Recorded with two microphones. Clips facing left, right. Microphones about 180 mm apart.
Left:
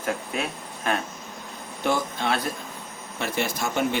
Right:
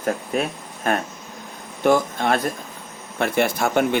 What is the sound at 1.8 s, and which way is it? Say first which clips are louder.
Speech: right 7 dB; 50° right (ahead or behind).